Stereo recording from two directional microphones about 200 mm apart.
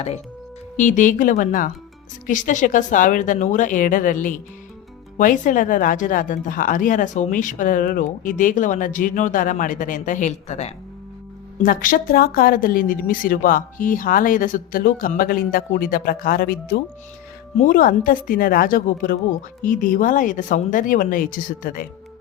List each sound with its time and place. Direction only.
0.8 s speech: 40° left (ahead or behind)
11.6 s speech: 45° left (ahead or behind)